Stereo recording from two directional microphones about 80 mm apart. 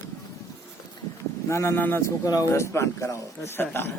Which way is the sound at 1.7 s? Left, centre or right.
Left.